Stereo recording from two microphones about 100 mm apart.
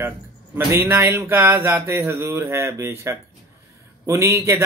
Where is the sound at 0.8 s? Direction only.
20° right (ahead or behind).